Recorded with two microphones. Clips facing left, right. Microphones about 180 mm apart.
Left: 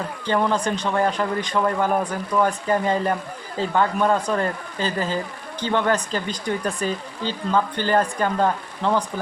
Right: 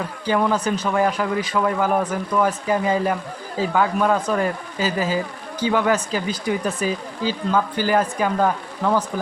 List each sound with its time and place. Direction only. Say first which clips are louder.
0.3 s speech: right 1 dB; 5° right (ahead or behind)